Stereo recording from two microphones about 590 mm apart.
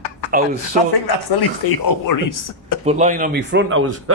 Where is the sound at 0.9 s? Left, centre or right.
Left.